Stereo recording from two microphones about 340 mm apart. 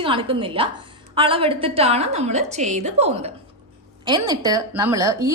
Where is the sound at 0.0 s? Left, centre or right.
Centre.